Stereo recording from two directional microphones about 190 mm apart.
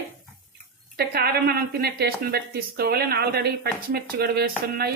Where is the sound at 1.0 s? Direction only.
55° right (ahead or behind).